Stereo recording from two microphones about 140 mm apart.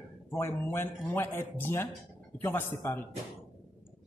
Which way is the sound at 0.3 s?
15° left (ahead or behind).